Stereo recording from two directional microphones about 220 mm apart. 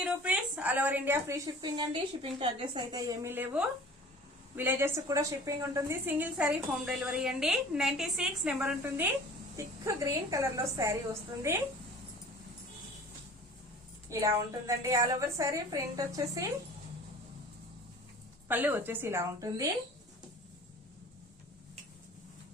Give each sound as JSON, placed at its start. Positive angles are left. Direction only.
{"t": 0.0, "sound": "a woman's voice", "side_deg": -5}
{"t": 14.1, "sound": "a woman's voice", "side_deg": -15}
{"t": 18.4, "sound": "a woman's voice", "side_deg": -10}